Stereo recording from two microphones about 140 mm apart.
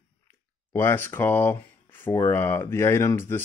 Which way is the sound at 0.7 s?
15° left (ahead or behind).